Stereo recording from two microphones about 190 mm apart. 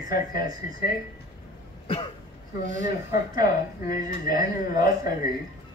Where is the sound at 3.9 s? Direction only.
50° left (ahead or behind).